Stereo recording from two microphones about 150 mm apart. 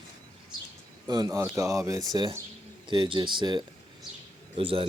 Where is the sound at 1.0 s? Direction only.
25° right (ahead or behind).